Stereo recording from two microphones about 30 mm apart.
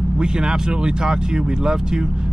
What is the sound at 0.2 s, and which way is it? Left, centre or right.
Speech, right.